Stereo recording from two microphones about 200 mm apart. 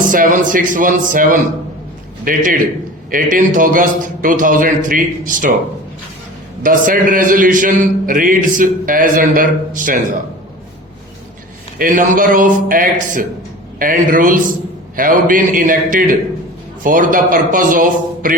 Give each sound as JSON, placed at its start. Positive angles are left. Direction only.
{"t": 0.1, "sound": "a man's voice", "side_deg": -40}
{"t": 6.6, "sound": "a man's voice", "side_deg": -40}
{"t": 11.8, "sound": "a man's voice", "side_deg": -45}